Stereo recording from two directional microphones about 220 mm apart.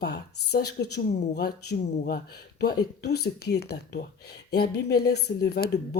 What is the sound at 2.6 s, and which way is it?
Speech, 45° left (ahead or behind).